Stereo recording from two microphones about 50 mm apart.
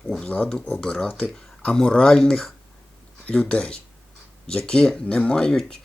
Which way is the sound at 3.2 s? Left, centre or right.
Left.